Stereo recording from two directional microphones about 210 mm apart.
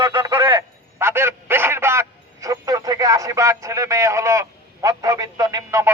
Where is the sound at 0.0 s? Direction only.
10° right (ahead or behind).